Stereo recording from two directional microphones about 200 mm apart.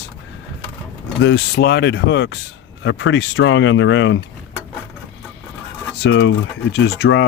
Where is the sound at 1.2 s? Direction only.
60° left (ahead or behind).